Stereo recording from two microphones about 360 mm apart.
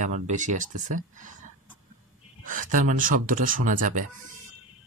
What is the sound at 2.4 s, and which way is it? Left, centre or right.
Speech, right.